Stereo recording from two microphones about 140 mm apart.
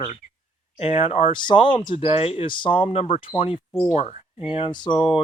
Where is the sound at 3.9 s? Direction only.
50° left (ahead or behind).